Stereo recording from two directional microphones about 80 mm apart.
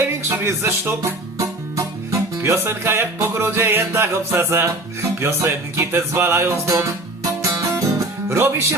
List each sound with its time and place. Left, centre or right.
0.3 s music: right